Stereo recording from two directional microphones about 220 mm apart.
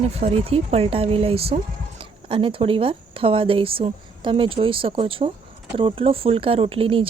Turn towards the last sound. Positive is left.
turn(degrees=-25)  # may be behind; listen again after turning